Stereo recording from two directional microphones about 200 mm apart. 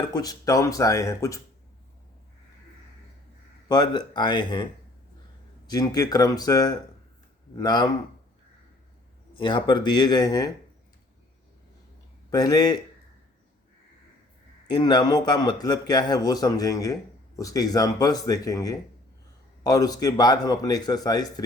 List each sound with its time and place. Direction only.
0.1 s speech: 20° left (ahead or behind)
3.7 s speech: 20° left (ahead or behind)
5.7 s speech: 20° left (ahead or behind)
9.4 s speech: 25° left (ahead or behind)
12.3 s speech: 20° left (ahead or behind)
14.8 s speech: 20° left (ahead or behind)